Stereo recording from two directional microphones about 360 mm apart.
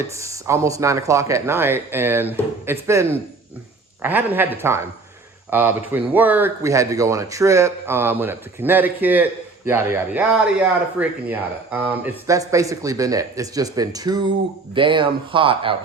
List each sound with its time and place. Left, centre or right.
0.2 s speech: centre